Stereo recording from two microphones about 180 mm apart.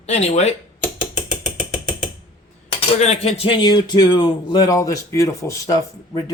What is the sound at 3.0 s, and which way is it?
Speech, 35° left (ahead or behind).